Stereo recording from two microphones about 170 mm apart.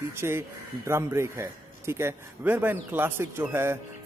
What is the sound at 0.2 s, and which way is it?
A man's voice, 15° right (ahead or behind).